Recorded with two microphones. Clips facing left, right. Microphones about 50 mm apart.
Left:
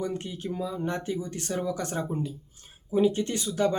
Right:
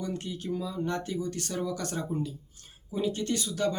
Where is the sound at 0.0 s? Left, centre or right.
Left.